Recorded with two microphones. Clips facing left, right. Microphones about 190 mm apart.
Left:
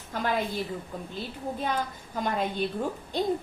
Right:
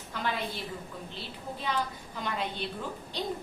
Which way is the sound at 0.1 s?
45° left (ahead or behind).